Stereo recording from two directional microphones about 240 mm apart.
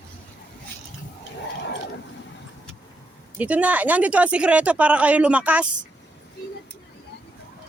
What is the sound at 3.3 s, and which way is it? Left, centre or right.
Speech, centre.